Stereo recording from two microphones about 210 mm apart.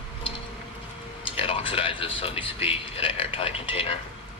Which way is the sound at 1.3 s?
25° left (ahead or behind).